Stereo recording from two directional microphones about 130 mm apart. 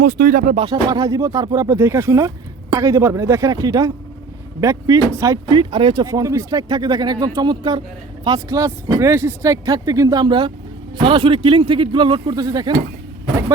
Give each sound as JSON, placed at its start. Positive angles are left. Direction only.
{"t": 0.7, "sound": "speech", "side_deg": -30}
{"t": 5.5, "sound": "speech", "side_deg": -40}